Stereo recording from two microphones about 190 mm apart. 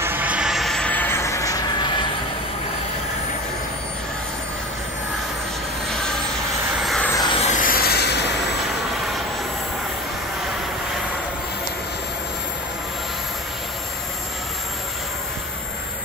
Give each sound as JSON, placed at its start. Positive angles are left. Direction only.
{"t": 0.0, "sound": "vehicle", "side_deg": -10}
{"t": 5.9, "sound": "vehicle", "side_deg": 5}
{"t": 7.2, "sound": "vehicle", "side_deg": 25}
{"t": 7.4, "sound": "rub", "side_deg": 45}